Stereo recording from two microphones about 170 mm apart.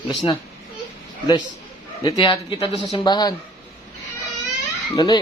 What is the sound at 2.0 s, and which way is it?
Speech, 30° left (ahead or behind).